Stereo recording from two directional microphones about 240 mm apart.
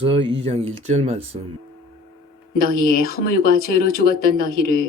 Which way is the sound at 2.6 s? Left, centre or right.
Left.